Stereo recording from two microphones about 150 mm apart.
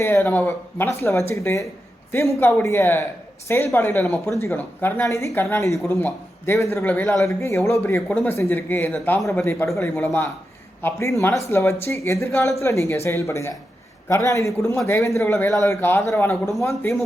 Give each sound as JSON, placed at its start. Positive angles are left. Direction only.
{"t": 0.0, "sound": "a woman's voice", "side_deg": 15}